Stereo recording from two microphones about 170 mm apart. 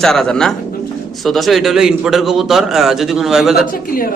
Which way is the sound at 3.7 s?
55° left (ahead or behind).